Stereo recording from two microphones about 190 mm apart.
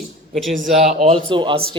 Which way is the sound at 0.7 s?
35° right (ahead or behind).